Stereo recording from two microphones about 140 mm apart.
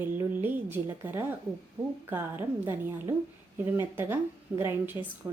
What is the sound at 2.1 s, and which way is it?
A woman's voice, 15° right (ahead or behind).